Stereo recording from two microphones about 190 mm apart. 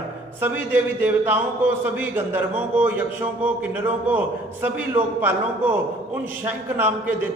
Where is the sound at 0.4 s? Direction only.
10° right (ahead or behind).